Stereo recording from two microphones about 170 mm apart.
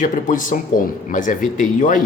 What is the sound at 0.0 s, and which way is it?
Speech, 50° left (ahead or behind).